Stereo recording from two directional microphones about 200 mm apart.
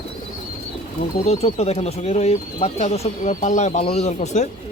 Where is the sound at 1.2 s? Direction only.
30° left (ahead or behind).